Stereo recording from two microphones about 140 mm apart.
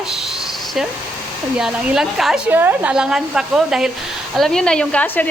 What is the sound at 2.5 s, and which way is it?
A woman's voice, 15° right (ahead or behind).